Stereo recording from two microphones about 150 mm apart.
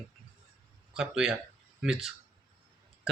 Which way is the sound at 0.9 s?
5° right (ahead or behind).